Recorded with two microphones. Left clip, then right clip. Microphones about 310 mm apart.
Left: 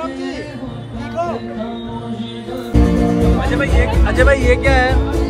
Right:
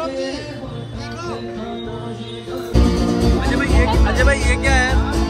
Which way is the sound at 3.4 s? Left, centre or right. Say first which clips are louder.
Left 2 dB; centre.